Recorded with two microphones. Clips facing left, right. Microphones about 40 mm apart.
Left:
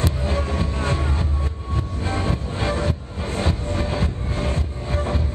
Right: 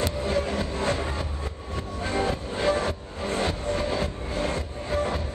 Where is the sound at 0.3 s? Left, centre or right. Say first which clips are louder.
Left 1 dB; left.